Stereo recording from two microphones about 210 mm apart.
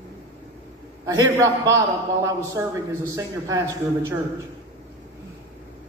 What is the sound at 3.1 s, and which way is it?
Speech, 15° right (ahead or behind).